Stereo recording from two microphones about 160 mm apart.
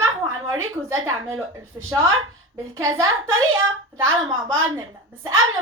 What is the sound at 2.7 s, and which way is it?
A woman's voice, 20° right (ahead or behind).